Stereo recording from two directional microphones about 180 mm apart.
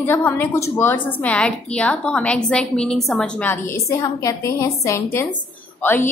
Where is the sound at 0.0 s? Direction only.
10° left (ahead or behind).